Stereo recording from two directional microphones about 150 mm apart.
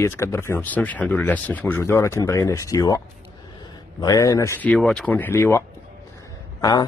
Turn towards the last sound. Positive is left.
turn(degrees=25)  # may be behind; listen again after turning